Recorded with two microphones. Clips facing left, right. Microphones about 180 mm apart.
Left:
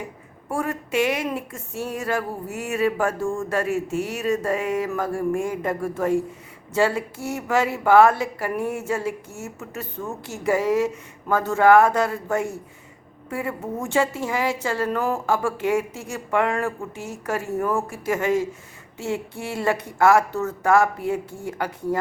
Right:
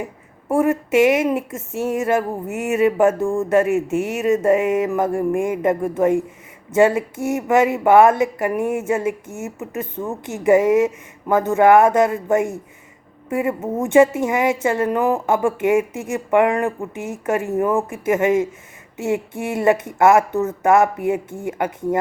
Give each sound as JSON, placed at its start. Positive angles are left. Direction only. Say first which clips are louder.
{"t": 0.5, "sound": "speech", "louder": "right 8 dB", "side_deg": -20}